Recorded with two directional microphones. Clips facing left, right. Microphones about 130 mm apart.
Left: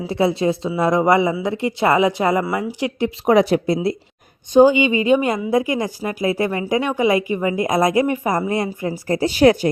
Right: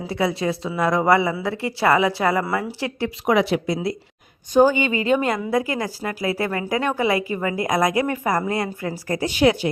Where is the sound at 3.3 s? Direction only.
40° left (ahead or behind).